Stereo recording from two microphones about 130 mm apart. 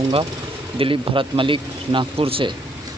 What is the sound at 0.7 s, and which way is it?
Speech, 40° right (ahead or behind).